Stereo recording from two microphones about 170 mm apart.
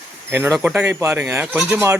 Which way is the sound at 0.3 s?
15° right (ahead or behind).